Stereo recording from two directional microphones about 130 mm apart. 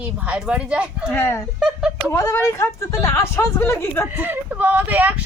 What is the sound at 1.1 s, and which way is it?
Speech, 20° left (ahead or behind).